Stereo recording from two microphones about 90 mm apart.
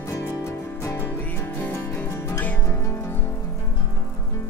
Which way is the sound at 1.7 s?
30° left (ahead or behind).